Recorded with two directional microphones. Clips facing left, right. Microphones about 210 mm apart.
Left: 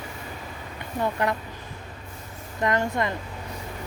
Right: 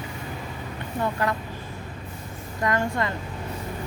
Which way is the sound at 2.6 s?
20° left (ahead or behind).